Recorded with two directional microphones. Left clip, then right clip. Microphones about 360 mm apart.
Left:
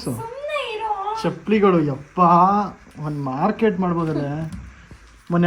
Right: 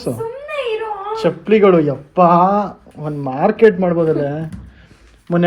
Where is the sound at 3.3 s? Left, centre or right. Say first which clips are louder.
Right 8 dB; centre.